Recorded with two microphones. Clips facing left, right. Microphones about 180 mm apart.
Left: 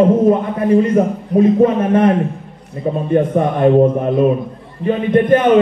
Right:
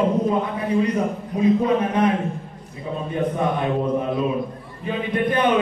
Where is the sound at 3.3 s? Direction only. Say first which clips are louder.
Left 12 dB; 50° left (ahead or behind).